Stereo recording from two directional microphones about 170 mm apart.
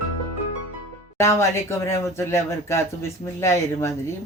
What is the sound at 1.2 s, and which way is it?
A woman's voice, 15° left (ahead or behind).